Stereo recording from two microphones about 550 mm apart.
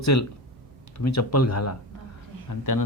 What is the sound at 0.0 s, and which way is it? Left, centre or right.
Speech, left.